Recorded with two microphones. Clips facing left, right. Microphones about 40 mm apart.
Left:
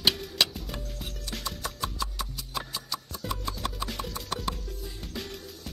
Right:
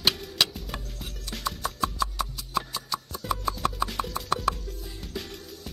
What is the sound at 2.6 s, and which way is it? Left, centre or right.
Music, centre.